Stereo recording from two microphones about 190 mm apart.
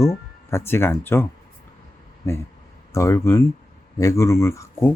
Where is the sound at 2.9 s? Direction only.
15° left (ahead or behind).